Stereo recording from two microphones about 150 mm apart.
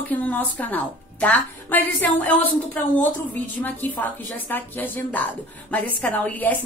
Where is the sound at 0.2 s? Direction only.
10° left (ahead or behind).